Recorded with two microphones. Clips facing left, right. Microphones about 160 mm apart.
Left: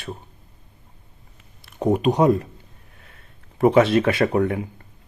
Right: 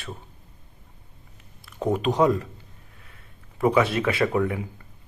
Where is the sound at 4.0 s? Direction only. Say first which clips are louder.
Left 3 dB; 40° left (ahead or behind).